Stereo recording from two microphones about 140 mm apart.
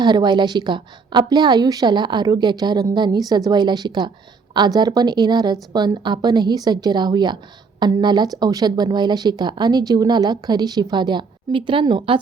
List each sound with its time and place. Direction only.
0.0 s speech: 30° right (ahead or behind)